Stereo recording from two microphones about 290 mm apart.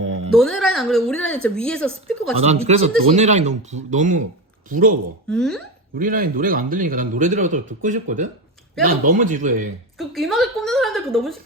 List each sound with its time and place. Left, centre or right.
0.3 s speech: centre
2.3 s a man's voice: right
5.3 s speech: centre
6.0 s a man's voice: right
10.0 s speech: centre